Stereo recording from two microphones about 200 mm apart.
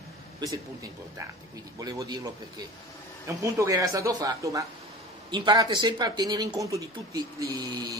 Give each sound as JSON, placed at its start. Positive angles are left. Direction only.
{"t": 0.4, "sound": "speech", "side_deg": -20}
{"t": 1.8, "sound": "speech", "side_deg": -15}
{"t": 3.4, "sound": "speech", "side_deg": -15}